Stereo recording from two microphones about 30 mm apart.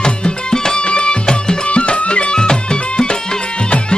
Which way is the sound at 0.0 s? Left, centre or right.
Left.